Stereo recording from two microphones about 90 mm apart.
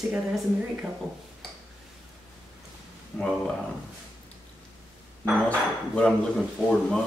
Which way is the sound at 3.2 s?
5° left (ahead or behind).